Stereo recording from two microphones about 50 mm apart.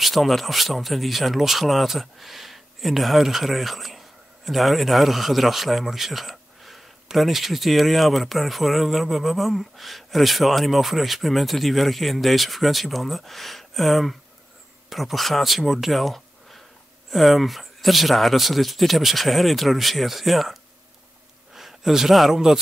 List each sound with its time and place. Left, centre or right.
0.0 s speech: centre
21.5 s speech: centre